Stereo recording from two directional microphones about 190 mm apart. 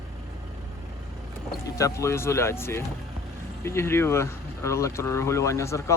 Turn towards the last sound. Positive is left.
turn(degrees=15)  # may be behind; listen again after turning